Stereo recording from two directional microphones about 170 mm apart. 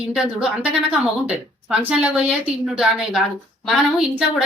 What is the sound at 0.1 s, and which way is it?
Speech, 5° right (ahead or behind).